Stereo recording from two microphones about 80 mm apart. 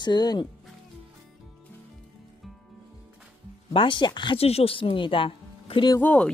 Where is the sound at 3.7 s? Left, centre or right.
Left.